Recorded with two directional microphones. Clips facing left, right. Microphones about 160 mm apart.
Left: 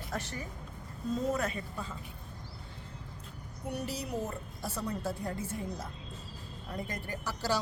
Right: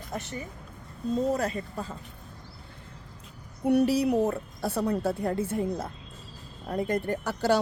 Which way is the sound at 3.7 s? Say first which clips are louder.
Right 14 dB; 65° right (ahead or behind).